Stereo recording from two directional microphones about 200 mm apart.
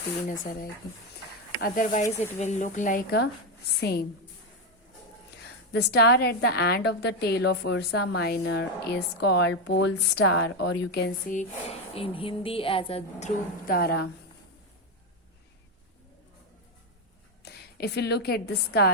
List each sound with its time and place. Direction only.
0.3 s speech: 45° left (ahead or behind)
5.7 s a woman's voice: 55° left (ahead or behind)
11.3 s speech: 35° left (ahead or behind); by 14.1 s 55° left (ahead or behind)
17.4 s a woman's voice: 55° left (ahead or behind)